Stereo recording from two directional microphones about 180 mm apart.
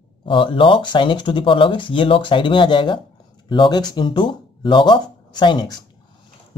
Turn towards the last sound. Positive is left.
turn(degrees=25)  # may be behind; listen again after turning